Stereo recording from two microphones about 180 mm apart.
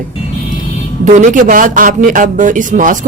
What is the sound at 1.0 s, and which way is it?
A woman's voice, 45° right (ahead or behind).